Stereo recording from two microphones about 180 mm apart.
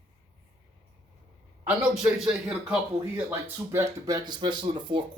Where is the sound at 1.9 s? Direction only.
Centre (ahead or behind).